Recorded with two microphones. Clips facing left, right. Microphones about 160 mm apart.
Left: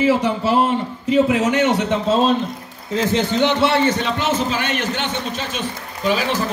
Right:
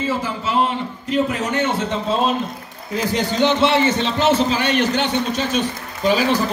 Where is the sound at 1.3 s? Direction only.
90° left.